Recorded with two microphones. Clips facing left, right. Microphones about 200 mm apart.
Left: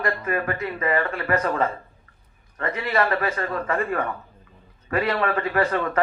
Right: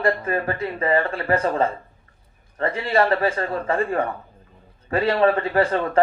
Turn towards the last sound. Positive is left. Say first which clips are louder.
# right 2 dB
turn(degrees=-30)  # may be behind; listen again after turning